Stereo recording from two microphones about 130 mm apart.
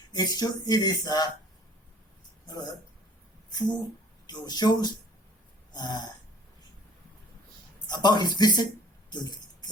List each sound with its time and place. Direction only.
0.1 s speech: 30° left (ahead or behind)
3.5 s speech: 35° left (ahead or behind)
5.7 s burping: 30° left (ahead or behind)
7.9 s speech: 35° left (ahead or behind)
9.0 s music: 35° left (ahead or behind)